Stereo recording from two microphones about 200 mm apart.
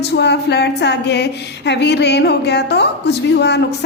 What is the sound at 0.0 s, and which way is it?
A woman's voice, 60° left (ahead or behind).